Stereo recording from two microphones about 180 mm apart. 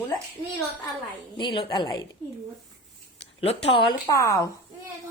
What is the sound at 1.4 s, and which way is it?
Speech, 25° left (ahead or behind).